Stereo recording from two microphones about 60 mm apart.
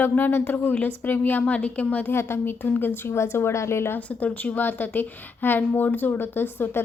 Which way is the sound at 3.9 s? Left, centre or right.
Left.